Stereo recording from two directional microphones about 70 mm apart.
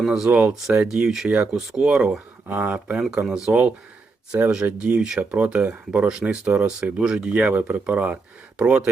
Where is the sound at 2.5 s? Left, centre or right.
Right.